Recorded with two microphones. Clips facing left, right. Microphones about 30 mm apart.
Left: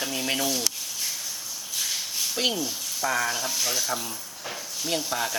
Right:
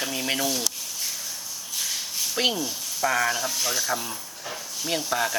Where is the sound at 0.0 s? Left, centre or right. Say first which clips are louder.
Right 1 dB; centre.